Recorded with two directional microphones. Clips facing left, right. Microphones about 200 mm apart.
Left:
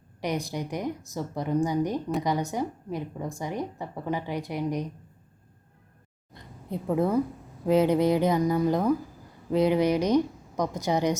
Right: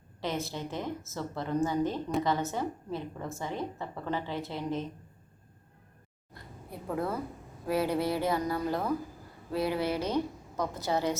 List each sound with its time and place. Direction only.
0.2 s a woman's voice: 15° left (ahead or behind)
6.3 s a sound: 20° left (ahead or behind)
7.7 s a woman's voice: 20° left (ahead or behind)